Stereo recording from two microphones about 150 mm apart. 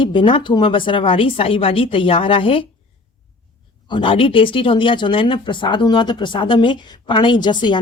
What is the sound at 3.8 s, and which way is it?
Speech, 35° left (ahead or behind).